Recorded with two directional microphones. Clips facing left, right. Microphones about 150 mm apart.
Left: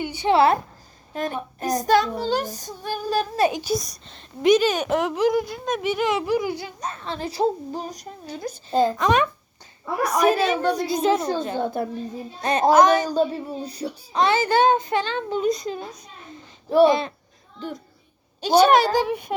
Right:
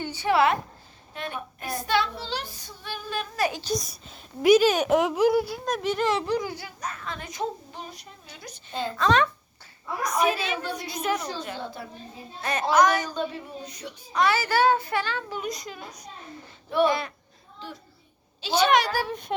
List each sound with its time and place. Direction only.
0.0 s a sound: 15° left (ahead or behind)
0.3 s child singing: 30° left (ahead or behind)
1.1 s child singing: 40° left (ahead or behind)
3.3 s a child's voice: 25° left (ahead or behind)
3.6 s a woman's voice: 5° left (ahead or behind); by 8.9 s 40° left (ahead or behind)
9.0 s a woman's voice: 15° left (ahead or behind)
9.8 s a woman's voice: 65° left (ahead or behind)
10.2 s child singing: 40° left (ahead or behind)
10.8 s a child's voice: 25° left (ahead or behind)
11.5 s a woman's voice: 50° left (ahead or behind)
12.4 s a child's voice: 30° left (ahead or behind)
13.1 s a child's voice: 35° left (ahead or behind)
18.4 s a woman's voice: 40° left (ahead or behind)
18.8 s a child's voice: 20° left (ahead or behind)